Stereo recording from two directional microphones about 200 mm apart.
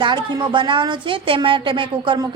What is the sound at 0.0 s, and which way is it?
A woman's voice, 20° right (ahead or behind).